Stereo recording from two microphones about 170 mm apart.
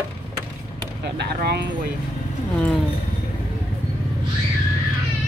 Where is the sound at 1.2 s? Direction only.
75° right (ahead or behind).